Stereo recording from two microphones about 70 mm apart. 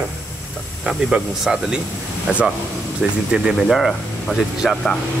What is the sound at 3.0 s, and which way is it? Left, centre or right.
Speech, centre.